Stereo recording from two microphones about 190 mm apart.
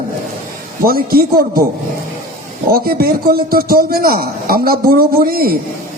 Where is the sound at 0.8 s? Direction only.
50° right (ahead or behind).